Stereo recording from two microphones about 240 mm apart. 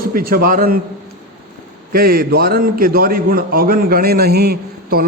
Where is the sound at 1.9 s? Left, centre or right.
Right.